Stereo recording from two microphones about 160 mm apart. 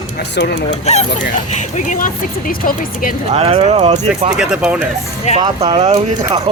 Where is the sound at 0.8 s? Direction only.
45° left (ahead or behind); by 3.1 s 60° left (ahead or behind).